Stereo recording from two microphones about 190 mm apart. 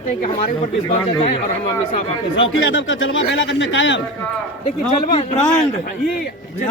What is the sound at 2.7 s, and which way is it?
Speech, 90° left.